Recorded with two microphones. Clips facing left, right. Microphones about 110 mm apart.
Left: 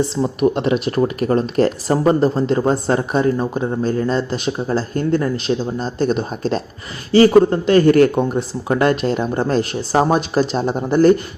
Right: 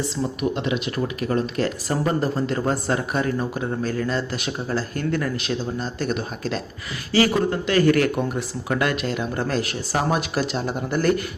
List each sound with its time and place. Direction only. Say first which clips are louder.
0.2 s speech: left 6 dB; 45° left (ahead or behind)